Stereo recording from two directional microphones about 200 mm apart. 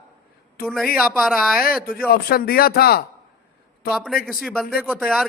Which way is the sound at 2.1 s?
50° left (ahead or behind).